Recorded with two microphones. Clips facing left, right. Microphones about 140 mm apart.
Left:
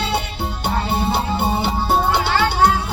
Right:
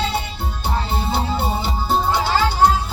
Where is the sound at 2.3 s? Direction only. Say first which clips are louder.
Right 1 dB; 65° left (ahead or behind).